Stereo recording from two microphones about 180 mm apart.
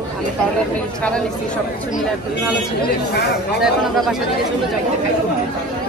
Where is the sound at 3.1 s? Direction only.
65° left (ahead or behind).